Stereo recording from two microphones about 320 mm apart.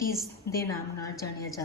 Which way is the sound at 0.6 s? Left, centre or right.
Centre.